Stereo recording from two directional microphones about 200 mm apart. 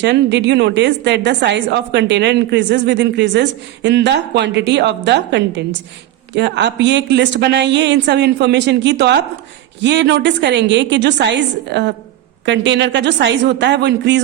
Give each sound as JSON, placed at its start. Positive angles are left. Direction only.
{"t": 0.0, "sound": "a woman's voice", "side_deg": -60}